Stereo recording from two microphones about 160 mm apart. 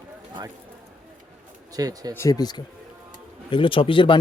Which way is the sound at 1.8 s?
25° right (ahead or behind).